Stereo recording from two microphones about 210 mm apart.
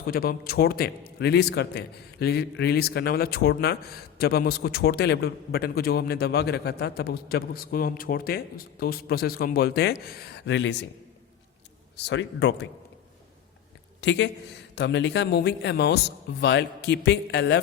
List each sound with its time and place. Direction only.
0.1 s a man's voice: 45° left (ahead or behind)
12.0 s speech: 55° left (ahead or behind)
14.0 s a man's voice: 60° left (ahead or behind)